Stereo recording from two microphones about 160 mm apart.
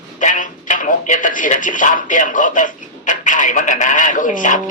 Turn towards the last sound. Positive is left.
turn(degrees=55)  # may be behind; listen again after turning